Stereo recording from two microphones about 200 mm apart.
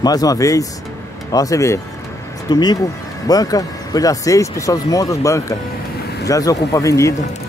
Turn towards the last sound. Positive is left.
turn(degrees=15)  # may be behind; listen again after turning